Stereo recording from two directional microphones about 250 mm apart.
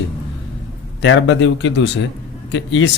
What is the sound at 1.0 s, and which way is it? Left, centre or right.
Speech, left.